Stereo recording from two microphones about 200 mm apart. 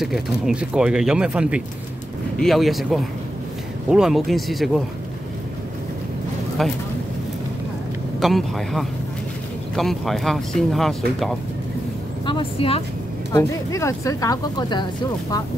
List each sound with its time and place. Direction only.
0.0 s speech: 5° right (ahead or behind)
6.6 s speech: centre (ahead or behind)
8.2 s speech: centre (ahead or behind)
12.3 s speech: 25° left (ahead or behind)
13.3 s speech: 15° left (ahead or behind)